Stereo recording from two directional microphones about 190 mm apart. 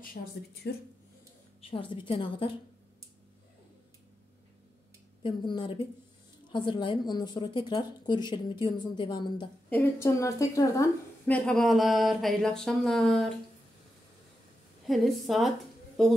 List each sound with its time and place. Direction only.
0.0 s speech: 50° left (ahead or behind)
1.6 s a woman's voice: 30° left (ahead or behind)
5.2 s a woman's voice: 25° left (ahead or behind)
9.7 s a woman's voice: 10° left (ahead or behind)
14.9 s a woman's voice: centre (ahead or behind)